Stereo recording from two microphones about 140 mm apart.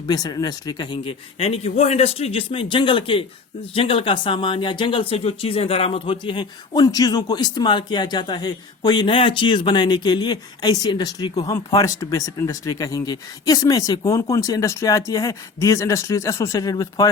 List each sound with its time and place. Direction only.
0.1 s speech: 30° left (ahead or behind)
1.4 s speech: 45° left (ahead or behind); by 17.1 s 25° left (ahead or behind)